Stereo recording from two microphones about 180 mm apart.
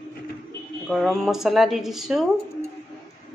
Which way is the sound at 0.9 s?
Centre (ahead or behind).